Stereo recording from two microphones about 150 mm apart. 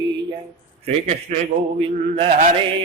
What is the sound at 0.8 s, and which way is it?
A man's voice, 45° right (ahead or behind).